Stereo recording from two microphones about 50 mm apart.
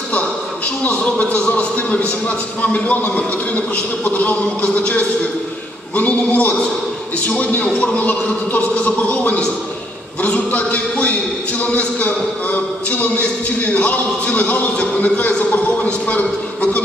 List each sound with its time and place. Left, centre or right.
0.8 s a man's voice: left